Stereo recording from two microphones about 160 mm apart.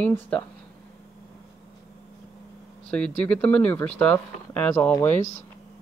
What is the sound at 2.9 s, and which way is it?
Speech, 5° left (ahead or behind).